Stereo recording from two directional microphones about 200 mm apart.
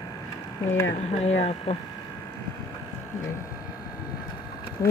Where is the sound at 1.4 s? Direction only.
30° left (ahead or behind).